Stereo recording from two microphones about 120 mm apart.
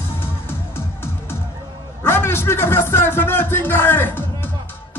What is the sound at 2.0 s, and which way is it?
Music, 20° left (ahead or behind).